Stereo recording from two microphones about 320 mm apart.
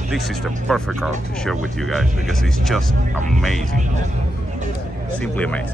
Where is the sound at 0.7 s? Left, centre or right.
Centre.